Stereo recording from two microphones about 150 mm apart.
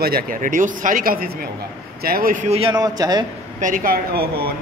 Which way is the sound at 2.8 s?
25° right (ahead or behind).